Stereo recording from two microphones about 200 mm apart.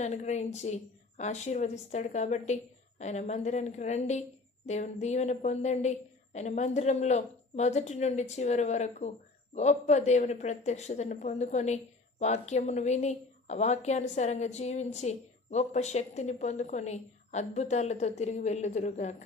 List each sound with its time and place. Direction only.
0.0 s a woman's voice: 35° left (ahead or behind)